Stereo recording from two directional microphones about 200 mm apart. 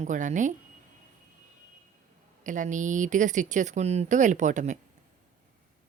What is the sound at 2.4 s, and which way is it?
Speech, 40° right (ahead or behind).